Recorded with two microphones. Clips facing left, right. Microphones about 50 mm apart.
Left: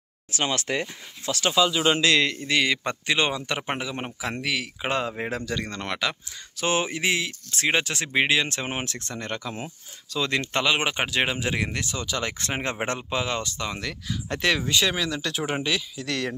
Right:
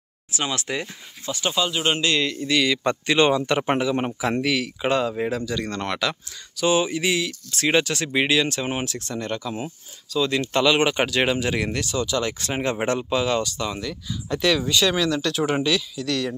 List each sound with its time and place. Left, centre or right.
0.3 s speech: left
1.2 s speech: left
2.3 s speech: left
2.8 s speech: centre
4.8 s speech: left
5.3 s speech: left
5.7 s speech: centre
6.5 s speech: left
10.5 s speech: left
13.7 s speech: left
14.9 s speech: centre; by 16.3 s left